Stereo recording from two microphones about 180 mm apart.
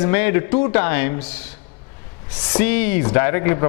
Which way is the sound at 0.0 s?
15° left (ahead or behind).